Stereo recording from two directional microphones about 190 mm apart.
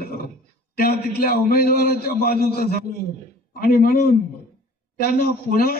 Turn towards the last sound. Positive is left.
turn(degrees=50)  # may be behind; listen again after turning